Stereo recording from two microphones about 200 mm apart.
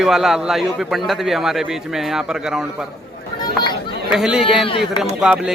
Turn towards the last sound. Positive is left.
turn(degrees=-5)  # may be behind; listen again after turning